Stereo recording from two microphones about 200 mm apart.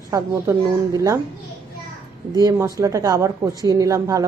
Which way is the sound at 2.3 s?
15° right (ahead or behind).